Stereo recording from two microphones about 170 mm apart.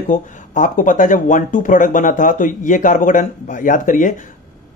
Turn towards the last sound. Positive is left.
turn(degrees=50)  # may be behind; listen again after turning